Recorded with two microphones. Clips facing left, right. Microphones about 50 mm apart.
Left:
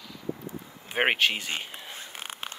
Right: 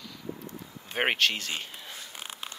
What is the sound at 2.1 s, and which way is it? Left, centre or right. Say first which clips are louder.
Zipper: left 3 dB; left.